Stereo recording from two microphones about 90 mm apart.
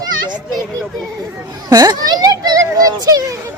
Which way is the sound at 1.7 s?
50° right (ahead or behind).